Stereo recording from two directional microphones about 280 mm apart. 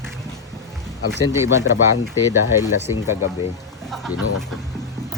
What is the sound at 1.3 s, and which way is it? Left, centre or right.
Speech, centre.